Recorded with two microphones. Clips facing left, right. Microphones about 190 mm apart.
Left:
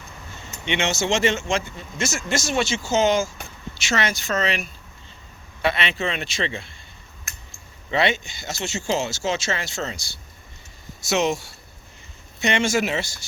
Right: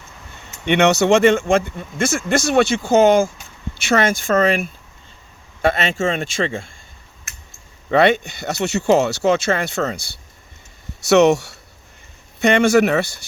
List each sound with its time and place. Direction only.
0.6 s speech: 60° right (ahead or behind)
7.9 s speech: 55° right (ahead or behind)
11.0 s speech: 65° right (ahead or behind)
12.4 s speech: 55° right (ahead or behind)